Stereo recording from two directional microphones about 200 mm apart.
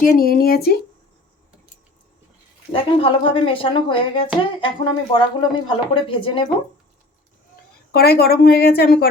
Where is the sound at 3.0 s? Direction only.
25° left (ahead or behind).